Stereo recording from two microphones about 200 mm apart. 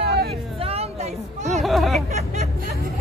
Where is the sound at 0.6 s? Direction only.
30° right (ahead or behind).